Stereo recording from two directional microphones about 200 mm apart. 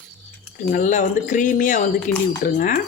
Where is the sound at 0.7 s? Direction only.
40° left (ahead or behind).